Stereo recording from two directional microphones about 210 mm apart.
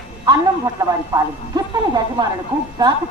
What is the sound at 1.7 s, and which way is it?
Speech, 20° right (ahead or behind).